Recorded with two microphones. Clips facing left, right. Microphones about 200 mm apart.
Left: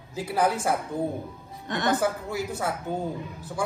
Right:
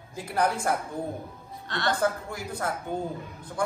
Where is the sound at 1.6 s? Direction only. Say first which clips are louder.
Left 3 dB; 20° left (ahead or behind).